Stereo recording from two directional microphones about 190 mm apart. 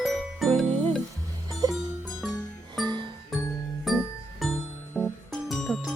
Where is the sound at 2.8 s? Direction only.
Centre (ahead or behind).